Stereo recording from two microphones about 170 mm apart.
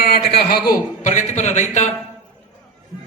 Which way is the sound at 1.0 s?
45° left (ahead or behind).